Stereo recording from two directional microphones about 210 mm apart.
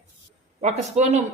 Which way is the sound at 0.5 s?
30° right (ahead or behind).